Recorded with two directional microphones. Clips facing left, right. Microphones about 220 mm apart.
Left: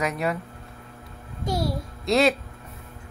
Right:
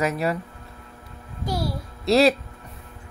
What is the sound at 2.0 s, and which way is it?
Speech, centre (ahead or behind).